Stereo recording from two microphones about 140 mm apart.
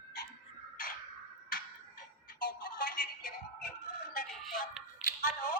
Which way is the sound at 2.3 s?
90° left.